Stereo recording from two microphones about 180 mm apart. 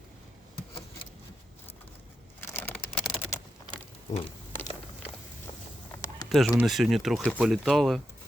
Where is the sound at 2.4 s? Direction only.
10° left (ahead or behind).